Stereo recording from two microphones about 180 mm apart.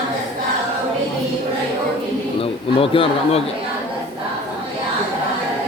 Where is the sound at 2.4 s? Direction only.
30° left (ahead or behind).